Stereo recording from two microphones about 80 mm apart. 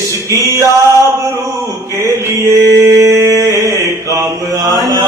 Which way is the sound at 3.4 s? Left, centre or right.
Right.